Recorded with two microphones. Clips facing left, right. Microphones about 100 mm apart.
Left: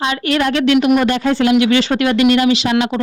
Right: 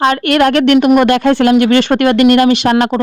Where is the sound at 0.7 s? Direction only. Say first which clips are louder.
Right 4 dB; 45° right (ahead or behind).